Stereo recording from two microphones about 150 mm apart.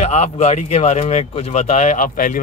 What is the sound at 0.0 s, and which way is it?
Speech, 45° left (ahead or behind).